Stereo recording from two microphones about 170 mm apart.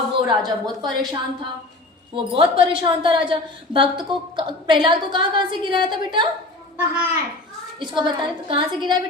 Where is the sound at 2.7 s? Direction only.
30° right (ahead or behind).